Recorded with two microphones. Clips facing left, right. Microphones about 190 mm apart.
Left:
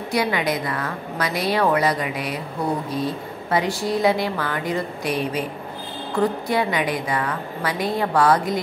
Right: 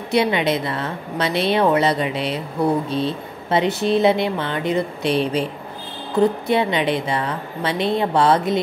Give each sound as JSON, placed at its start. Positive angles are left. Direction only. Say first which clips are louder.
{"t": 0.1, "sound": "speech", "louder": "right 4 dB", "side_deg": -25}